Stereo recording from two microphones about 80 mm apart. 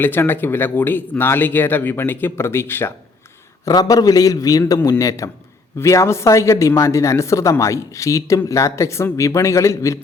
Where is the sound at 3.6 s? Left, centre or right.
Left.